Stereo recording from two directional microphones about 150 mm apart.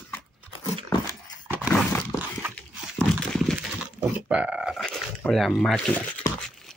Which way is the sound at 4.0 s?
10° right (ahead or behind).